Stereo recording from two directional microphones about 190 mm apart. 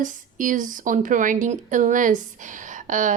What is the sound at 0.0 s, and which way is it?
Speech, 45° right (ahead or behind).